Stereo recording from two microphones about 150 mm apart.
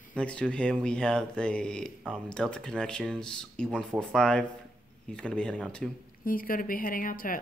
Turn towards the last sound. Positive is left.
turn(degrees=65)  # may be behind; listen again after turning